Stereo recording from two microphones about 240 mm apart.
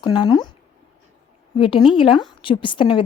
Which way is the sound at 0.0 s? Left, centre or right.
Centre.